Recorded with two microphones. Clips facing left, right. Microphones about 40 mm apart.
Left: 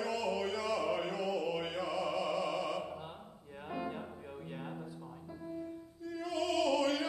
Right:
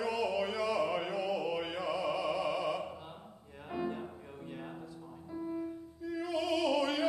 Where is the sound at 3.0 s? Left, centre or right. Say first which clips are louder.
Left 1 dB; centre.